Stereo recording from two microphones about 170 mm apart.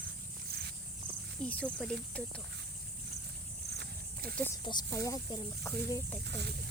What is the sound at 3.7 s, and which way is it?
Walk, 70° right (ahead or behind).